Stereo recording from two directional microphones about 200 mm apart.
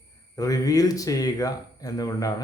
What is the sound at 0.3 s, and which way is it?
A man's voice, 15° left (ahead or behind).